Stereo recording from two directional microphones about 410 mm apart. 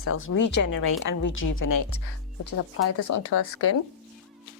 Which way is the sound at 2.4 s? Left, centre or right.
Left.